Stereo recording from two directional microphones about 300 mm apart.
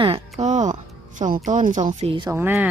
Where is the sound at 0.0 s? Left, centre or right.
Centre.